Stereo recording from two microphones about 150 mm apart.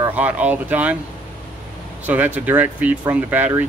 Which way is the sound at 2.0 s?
10° right (ahead or behind).